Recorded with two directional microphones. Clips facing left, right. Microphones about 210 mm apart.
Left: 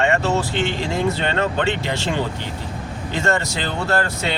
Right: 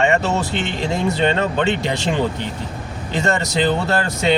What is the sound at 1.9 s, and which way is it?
Speech, 15° right (ahead or behind).